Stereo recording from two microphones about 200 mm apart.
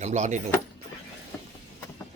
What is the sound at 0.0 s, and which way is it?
Speech, 35° right (ahead or behind).